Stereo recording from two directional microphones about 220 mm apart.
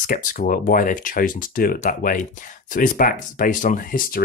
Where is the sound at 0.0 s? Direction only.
40° left (ahead or behind).